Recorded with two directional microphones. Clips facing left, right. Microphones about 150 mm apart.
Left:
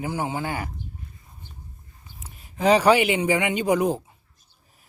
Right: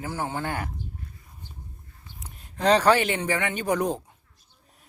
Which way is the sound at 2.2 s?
Centre (ahead or behind).